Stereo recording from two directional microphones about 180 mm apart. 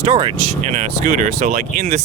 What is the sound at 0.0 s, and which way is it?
Speech, 30° right (ahead or behind).